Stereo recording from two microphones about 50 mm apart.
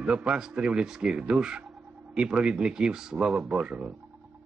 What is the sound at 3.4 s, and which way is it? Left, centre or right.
Speech, right.